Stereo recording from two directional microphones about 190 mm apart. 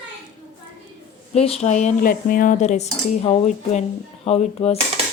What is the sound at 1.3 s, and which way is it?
A woman's voice, 30° left (ahead or behind).